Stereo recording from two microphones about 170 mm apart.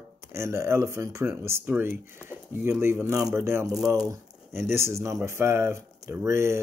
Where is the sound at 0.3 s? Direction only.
15° right (ahead or behind).